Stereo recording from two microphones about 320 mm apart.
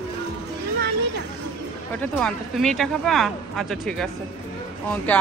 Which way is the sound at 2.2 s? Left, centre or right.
Centre.